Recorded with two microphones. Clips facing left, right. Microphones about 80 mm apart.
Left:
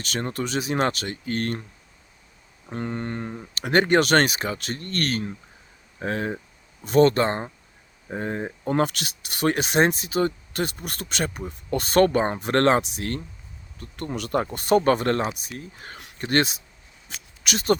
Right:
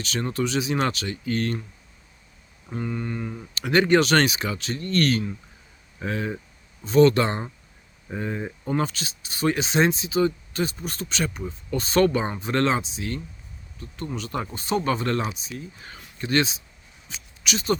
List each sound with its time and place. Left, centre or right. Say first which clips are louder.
0.0 s speech: right 2 dB; left
2.7 s speech: even; left
3.5 s speech: even; left
12.3 s speech: left 4 dB; left
14.5 s speech: left 6 dB; left